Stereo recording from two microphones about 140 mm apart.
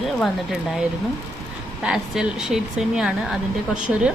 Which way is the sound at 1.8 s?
5° right (ahead or behind).